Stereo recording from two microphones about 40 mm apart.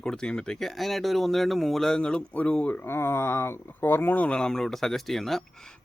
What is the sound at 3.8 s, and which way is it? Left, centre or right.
Speech, left.